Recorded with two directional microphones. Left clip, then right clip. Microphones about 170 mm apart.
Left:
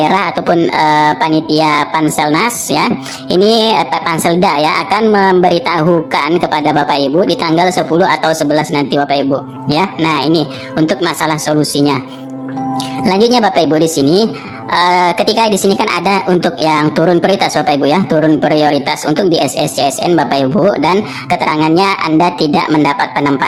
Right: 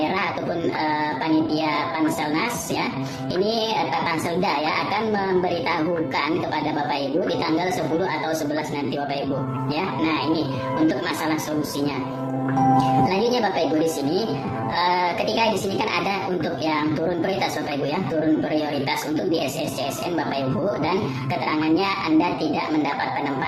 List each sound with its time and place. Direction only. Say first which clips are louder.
0.0 s a woman's voice: left 12 dB; 45° left (ahead or behind)